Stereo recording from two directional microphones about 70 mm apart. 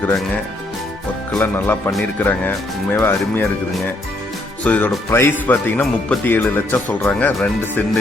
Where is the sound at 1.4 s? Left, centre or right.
Left.